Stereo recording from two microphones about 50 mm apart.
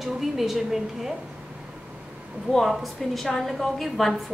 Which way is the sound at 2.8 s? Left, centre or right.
Centre.